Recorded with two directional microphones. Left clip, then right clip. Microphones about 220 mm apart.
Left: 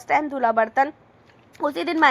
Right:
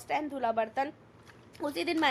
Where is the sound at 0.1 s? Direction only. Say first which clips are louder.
Left 11 dB; 15° left (ahead or behind).